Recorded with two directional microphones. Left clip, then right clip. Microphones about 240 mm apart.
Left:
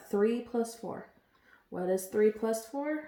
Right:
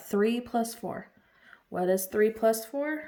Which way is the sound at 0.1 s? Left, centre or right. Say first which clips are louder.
Right 2 dB; right.